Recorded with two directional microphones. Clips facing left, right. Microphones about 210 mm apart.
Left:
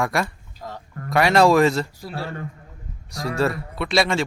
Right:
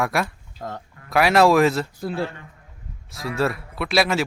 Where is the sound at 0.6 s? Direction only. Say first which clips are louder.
Right 3 dB; 55° right (ahead or behind).